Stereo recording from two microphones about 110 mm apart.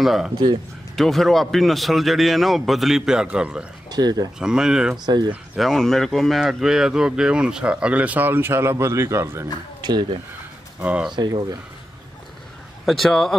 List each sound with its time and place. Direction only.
0.0 s a man's voice: centre (ahead or behind)
3.9 s speech: 35° right (ahead or behind)
4.4 s speech: 5° right (ahead or behind)
5.0 s speech: 40° right (ahead or behind)
5.6 s speech: 5° left (ahead or behind); by 9.5 s 25° right (ahead or behind)
9.8 s a sound: 40° right (ahead or behind)
10.8 s speech: 10° right (ahead or behind)
11.1 s speech: 40° right (ahead or behind)
12.8 s a man's voice: centre (ahead or behind)